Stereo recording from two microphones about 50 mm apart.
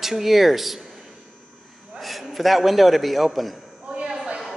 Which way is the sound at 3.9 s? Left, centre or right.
Right.